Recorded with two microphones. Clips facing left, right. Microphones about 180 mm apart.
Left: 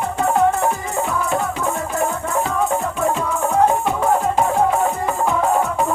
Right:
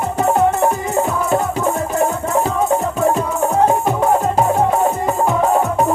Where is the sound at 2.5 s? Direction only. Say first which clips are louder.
Right 3 dB; 20° right (ahead or behind).